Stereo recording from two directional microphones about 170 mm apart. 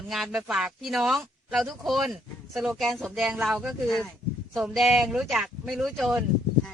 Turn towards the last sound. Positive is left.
turn(degrees=0)  # may be behind; listen again after turning